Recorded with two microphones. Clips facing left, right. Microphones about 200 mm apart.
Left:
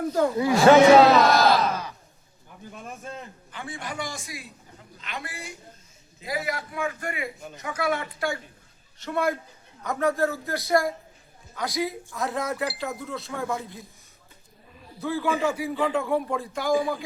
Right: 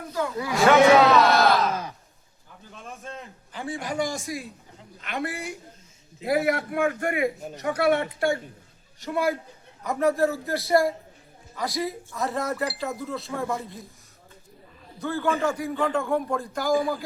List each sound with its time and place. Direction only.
0.0 s a sound: 50° left (ahead or behind)
0.3 s speech: 30° left (ahead or behind)
1.1 s speech: 15° left (ahead or behind)
2.7 s speech: 5° left (ahead or behind)
3.5 s a man's voice: 35° right (ahead or behind)
7.4 s speech: 35° right (ahead or behind)
9.0 s a man's voice: 10° right (ahead or behind)
9.8 s speech: centre (ahead or behind)
15.0 s speech: centre (ahead or behind)